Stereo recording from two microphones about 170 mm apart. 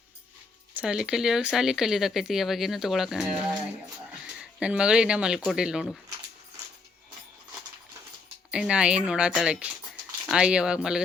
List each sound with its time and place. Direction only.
0.8 s speech: 5° right (ahead or behind)
4.6 s speech: 5° right (ahead or behind)
8.4 s speech: 5° right (ahead or behind)